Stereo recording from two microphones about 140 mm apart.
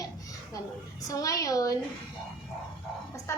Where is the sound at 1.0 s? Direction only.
25° left (ahead or behind).